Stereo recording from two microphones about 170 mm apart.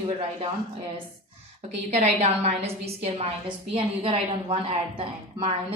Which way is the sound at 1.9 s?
40° right (ahead or behind).